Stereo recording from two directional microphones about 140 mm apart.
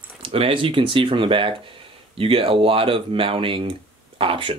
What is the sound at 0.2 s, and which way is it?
Speech, 40° right (ahead or behind).